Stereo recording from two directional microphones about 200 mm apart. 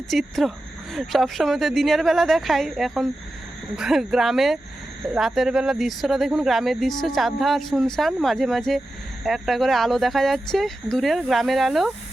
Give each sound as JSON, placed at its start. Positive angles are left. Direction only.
{"t": 0.1, "sound": "speech", "side_deg": 0}